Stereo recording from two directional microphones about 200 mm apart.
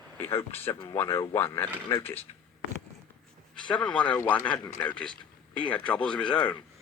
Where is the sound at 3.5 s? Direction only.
5° left (ahead or behind).